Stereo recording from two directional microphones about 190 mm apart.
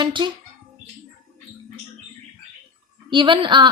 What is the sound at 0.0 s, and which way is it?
Speech, 25° right (ahead or behind).